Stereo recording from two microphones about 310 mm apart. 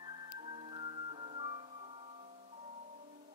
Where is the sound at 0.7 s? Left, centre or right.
Centre.